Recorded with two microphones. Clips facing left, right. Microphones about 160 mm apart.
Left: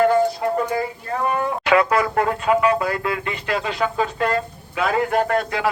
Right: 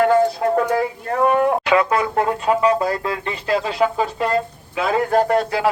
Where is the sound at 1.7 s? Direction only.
25° right (ahead or behind).